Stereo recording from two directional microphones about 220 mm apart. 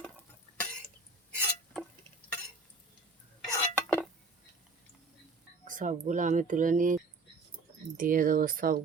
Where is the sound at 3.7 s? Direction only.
5° left (ahead or behind).